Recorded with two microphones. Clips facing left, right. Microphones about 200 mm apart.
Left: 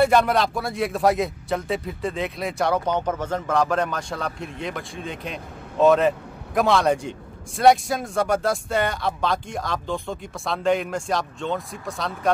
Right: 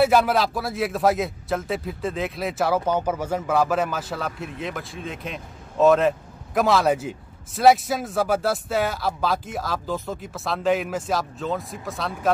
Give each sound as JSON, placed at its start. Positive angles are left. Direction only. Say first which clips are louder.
{"t": 0.0, "sound": "speech", "louder": "even", "side_deg": -5}